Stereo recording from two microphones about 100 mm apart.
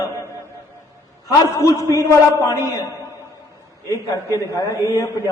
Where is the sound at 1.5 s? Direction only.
30° left (ahead or behind).